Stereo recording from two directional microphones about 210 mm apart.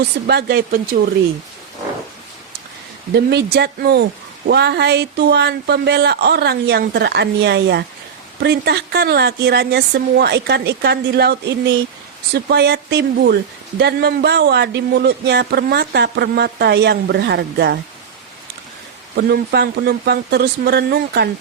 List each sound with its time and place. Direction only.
0.3 s speech: 50° right (ahead or behind)
3.2 s speech: 55° right (ahead or behind)
19.1 s speech: 50° right (ahead or behind)